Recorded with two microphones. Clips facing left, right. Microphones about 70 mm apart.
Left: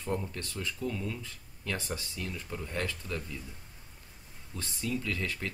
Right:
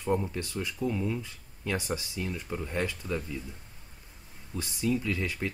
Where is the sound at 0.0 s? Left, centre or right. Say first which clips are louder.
Right 5 dB; centre.